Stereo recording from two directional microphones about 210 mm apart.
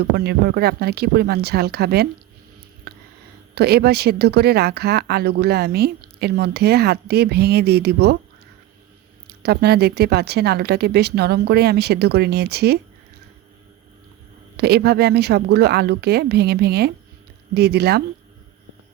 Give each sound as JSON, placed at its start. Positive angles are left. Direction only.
{"t": 0.0, "sound": "speech", "side_deg": -50}
{"t": 2.9, "sound": "a sound", "side_deg": -50}
{"t": 3.5, "sound": "speech", "side_deg": -50}
{"t": 9.2, "sound": "speech", "side_deg": -50}
{"t": 14.5, "sound": "speech", "side_deg": -50}